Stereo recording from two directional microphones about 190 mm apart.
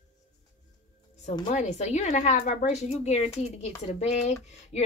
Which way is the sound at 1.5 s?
35° left (ahead or behind).